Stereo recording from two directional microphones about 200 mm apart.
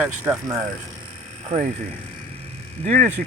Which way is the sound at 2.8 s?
40° right (ahead or behind).